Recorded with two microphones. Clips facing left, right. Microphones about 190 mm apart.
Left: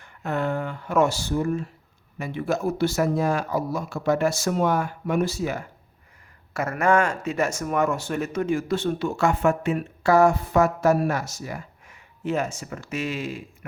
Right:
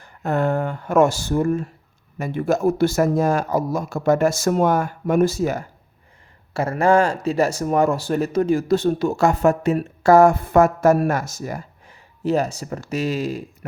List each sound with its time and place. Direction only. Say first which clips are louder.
0.0 s speech: right 5 dB; 45° right (ahead or behind)
6.5 s speech: right 4 dB; 30° right (ahead or behind)